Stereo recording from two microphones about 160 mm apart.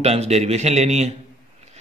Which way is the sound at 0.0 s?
40° right (ahead or behind).